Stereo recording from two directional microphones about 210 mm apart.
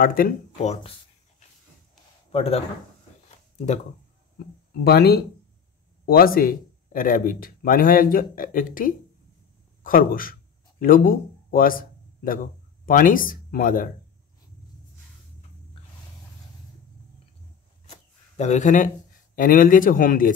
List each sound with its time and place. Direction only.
0.0 s a man's voice: 40° left (ahead or behind)
2.3 s speech: 30° left (ahead or behind)
4.8 s speech: 50° left (ahead or behind)
12.8 s speech: 40° left (ahead or behind)
17.8 s a sound: 35° left (ahead or behind)
19.3 s a man's voice: 40° left (ahead or behind)